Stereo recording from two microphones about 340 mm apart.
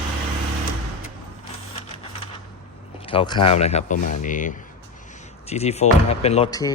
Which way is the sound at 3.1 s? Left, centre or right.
Centre.